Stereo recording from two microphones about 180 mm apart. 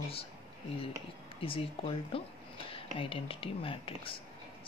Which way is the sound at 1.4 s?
30° left (ahead or behind).